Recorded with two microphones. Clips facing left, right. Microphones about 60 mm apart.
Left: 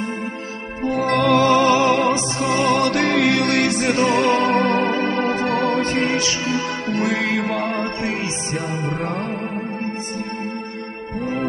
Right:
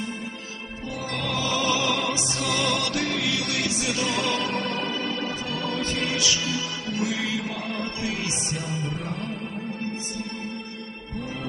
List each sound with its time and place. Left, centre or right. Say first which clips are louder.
0.8 s music: left 14 dB; left
2.3 s music: left 8 dB; left
6.9 s music: left 6 dB; left